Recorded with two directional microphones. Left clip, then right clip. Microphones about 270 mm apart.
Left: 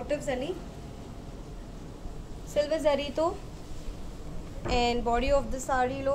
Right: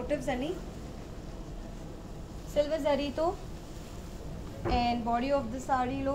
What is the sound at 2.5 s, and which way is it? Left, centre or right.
Speech, left.